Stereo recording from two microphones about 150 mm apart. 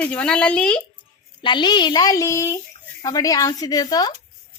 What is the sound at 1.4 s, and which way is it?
A woman's voice, 30° left (ahead or behind).